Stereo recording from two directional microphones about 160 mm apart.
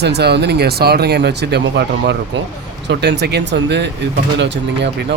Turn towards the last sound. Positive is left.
turn(degrees=-90)